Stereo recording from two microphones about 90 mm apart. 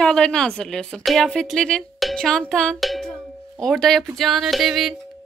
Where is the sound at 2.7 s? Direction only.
Centre (ahead or behind).